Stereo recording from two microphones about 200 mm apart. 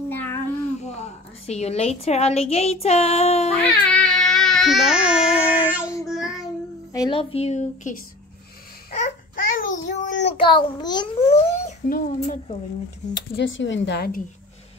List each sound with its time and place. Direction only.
0.1 s a sound: 10° left (ahead or behind)
1.4 s speech: 30° left (ahead or behind)
3.8 s baby cry: 5° left (ahead or behind)
5.3 s child singing: 5° right (ahead or behind)
6.9 s speech: 20° left (ahead or behind); by 8.0 s 40° left (ahead or behind)
8.9 s babbling: 40° left (ahead or behind)
9.8 s child singing: 35° left (ahead or behind)
10.4 s a child's voice: 20° left (ahead or behind)
11.2 s a child's voice: 35° left (ahead or behind)
13.4 s a woman's voice: 65° left (ahead or behind)